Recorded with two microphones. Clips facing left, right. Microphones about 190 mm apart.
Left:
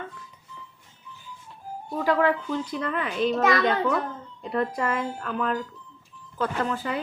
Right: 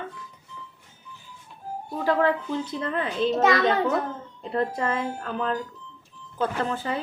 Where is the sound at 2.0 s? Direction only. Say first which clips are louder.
Even; 30° right (ahead or behind).